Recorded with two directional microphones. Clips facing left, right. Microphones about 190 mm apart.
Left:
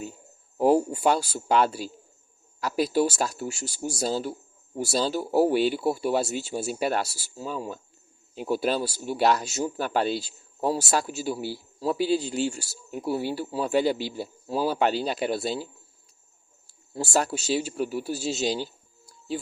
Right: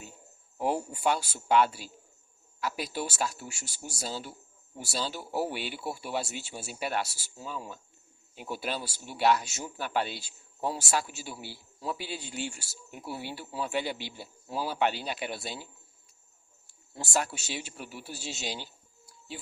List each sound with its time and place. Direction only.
0.6 s speech: 40° left (ahead or behind)
16.6 s speech: 35° left (ahead or behind)